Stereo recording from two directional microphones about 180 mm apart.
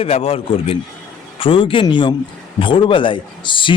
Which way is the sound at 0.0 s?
30° left (ahead or behind).